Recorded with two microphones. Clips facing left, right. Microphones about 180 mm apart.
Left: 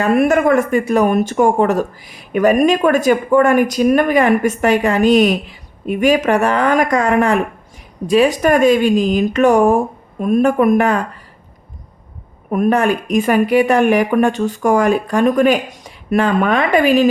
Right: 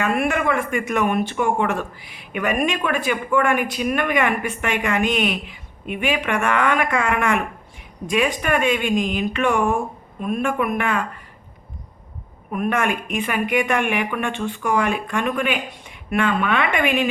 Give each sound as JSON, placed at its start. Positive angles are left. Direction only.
{"t": 0.0, "sound": "speech", "side_deg": 40}
{"t": 12.5, "sound": "speech", "side_deg": 40}